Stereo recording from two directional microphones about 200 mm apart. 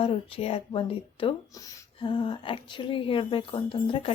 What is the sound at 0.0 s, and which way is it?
A woman's voice, 30° left (ahead or behind).